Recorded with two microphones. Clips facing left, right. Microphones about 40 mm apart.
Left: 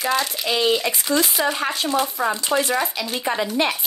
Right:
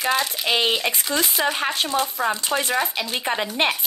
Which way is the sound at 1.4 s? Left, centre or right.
Right.